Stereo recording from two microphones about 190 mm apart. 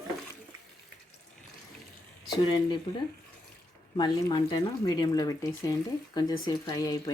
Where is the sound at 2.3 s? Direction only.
25° left (ahead or behind).